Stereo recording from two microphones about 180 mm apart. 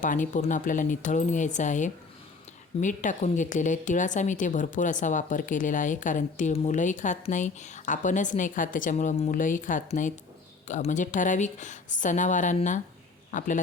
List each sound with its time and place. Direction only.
0.0 s a woman's voice: 45° left (ahead or behind)